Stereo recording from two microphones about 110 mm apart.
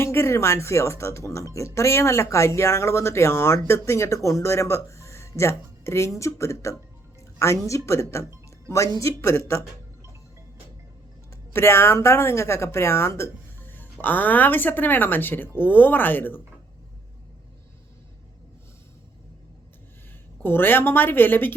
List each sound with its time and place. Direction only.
0.0 s a woman's voice: 25° left (ahead or behind)
11.5 s speech: 25° left (ahead or behind)
20.4 s speech: 20° left (ahead or behind)